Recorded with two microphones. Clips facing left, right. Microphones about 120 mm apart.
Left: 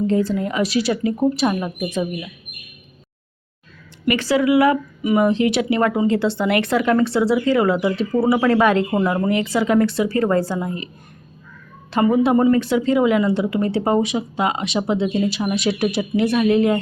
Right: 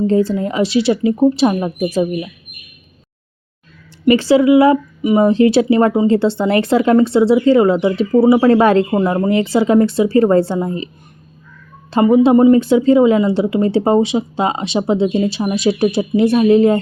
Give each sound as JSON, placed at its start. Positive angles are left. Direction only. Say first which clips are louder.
{"t": 0.1, "sound": "speech", "louder": "right 4 dB", "side_deg": -30}
{"t": 4.0, "sound": "speech", "louder": "right 7 dB", "side_deg": -30}
{"t": 8.9, "sound": "speech", "louder": "right 4 dB", "side_deg": -20}
{"t": 11.9, "sound": "speech", "louder": "right 6 dB", "side_deg": -25}